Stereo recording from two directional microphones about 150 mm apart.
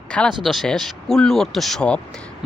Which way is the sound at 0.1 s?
5° left (ahead or behind).